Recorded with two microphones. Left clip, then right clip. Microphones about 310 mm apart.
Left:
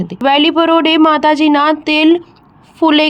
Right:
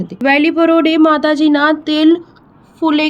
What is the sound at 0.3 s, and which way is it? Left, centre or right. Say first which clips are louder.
Speech: left 1 dB; left.